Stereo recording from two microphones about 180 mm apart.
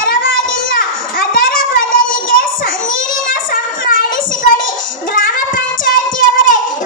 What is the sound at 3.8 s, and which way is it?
Child singing, 50° left (ahead or behind).